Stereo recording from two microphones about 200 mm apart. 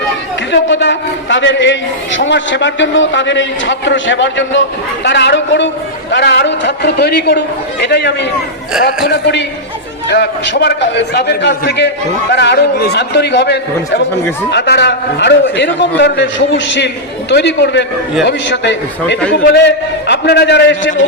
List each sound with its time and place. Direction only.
0.5 s a man's voice: 60° left (ahead or behind)